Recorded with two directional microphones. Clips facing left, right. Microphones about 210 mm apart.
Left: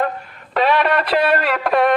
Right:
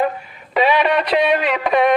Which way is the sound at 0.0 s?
5° right (ahead or behind).